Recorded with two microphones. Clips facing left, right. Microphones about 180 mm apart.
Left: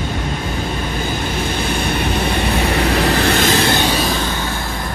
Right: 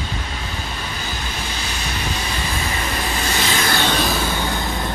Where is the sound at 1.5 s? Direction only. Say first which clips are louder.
Left 9 dB; 55° left (ahead or behind).